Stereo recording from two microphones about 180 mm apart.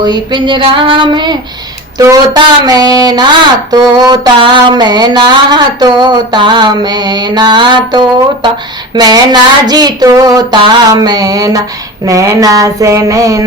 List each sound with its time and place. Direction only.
0.0 s mantra: 25° right (ahead or behind)